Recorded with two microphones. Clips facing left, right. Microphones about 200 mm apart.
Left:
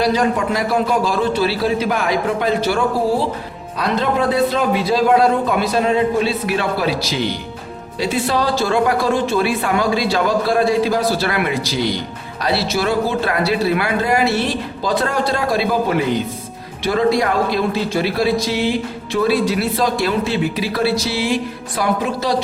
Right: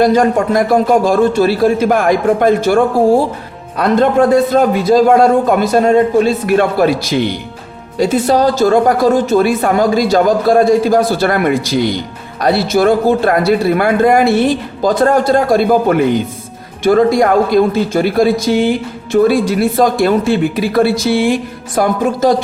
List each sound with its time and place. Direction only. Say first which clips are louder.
0.0 s a woman's voice: right 6 dB; 50° right (ahead or behind)